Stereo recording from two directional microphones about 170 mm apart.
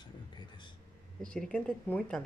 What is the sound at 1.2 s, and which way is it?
Speech, 5° left (ahead or behind).